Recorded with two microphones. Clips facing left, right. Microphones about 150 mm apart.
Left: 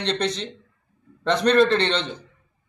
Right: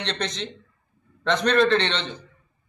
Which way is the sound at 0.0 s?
35° left (ahead or behind).